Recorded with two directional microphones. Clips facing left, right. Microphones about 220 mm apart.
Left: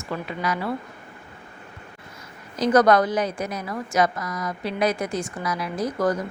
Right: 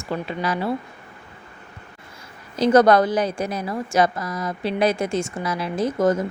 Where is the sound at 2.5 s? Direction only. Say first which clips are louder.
Right 3 dB; 25° right (ahead or behind).